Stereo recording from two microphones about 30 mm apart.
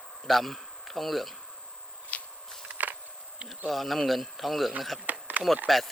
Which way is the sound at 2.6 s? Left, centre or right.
Right.